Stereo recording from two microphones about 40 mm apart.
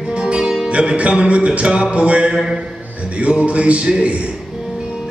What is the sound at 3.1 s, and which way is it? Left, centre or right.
A man's voice, right.